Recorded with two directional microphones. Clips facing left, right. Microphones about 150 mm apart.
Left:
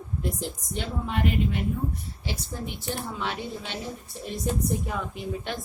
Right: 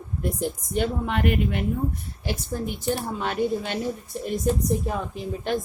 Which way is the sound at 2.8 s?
50° right (ahead or behind).